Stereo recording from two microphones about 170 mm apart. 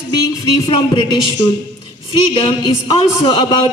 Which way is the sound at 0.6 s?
25° left (ahead or behind).